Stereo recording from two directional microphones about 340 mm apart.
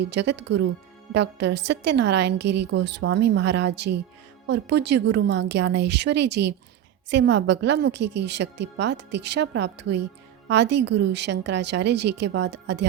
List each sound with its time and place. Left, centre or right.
0.0 s a woman's voice: right